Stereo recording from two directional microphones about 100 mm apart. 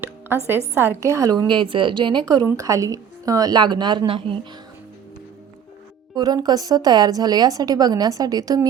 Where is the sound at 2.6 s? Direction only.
35° right (ahead or behind); by 4.3 s 60° right (ahead or behind).